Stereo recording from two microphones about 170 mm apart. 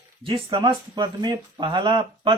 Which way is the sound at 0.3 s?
30° right (ahead or behind).